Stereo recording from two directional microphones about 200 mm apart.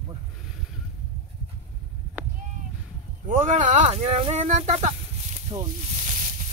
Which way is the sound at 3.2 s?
40° right (ahead or behind).